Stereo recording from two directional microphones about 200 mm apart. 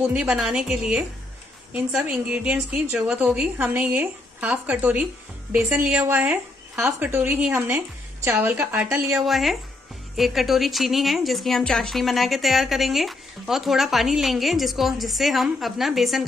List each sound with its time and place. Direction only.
0.0 s a woman's voice: 5° right (ahead or behind)
9.2 s a woman's voice: centre (ahead or behind)